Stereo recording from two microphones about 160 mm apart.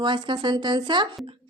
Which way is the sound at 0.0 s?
30° right (ahead or behind).